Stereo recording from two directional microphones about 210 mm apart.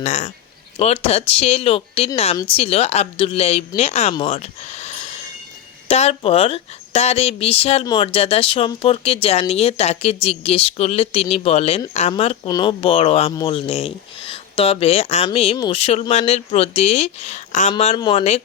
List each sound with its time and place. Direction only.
0.0 s speech: 35° left (ahead or behind)